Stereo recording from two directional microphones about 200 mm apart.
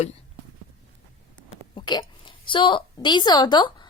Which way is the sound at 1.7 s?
20° left (ahead or behind).